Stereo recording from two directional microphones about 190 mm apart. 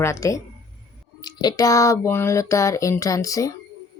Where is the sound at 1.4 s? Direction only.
20° left (ahead or behind).